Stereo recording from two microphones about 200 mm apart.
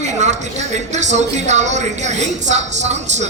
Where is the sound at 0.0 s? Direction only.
35° right (ahead or behind).